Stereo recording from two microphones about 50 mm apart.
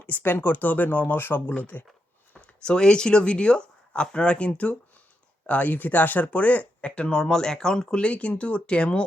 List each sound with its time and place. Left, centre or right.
0.2 s speech: left
2.6 s speech: centre